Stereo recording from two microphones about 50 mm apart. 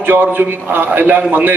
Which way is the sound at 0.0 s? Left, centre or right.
Right.